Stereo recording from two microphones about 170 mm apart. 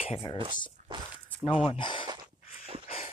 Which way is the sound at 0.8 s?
45° right (ahead or behind).